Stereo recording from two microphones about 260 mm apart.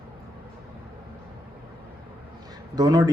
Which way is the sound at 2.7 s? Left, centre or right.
Centre.